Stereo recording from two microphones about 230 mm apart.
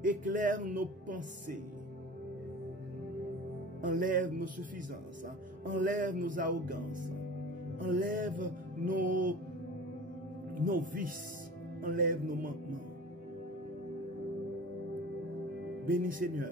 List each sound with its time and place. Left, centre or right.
0.0 s music: right
3.8 s music: right
5.7 s music: right
10.5 s speech: right
11.8 s music: right
15.9 s music: right